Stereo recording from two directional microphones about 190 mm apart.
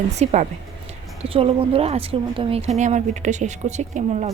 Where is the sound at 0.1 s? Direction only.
35° right (ahead or behind).